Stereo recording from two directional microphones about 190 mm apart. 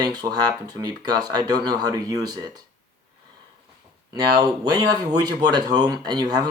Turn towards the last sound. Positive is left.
turn(degrees=-20)  # may be behind; listen again after turning